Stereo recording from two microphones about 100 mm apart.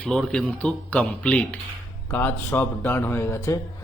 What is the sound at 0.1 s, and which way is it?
Speech, 10° left (ahead or behind).